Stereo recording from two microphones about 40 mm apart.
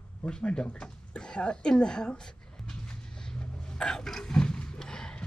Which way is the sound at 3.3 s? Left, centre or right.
Centre.